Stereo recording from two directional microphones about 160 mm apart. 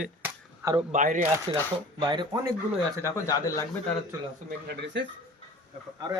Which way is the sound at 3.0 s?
20° left (ahead or behind).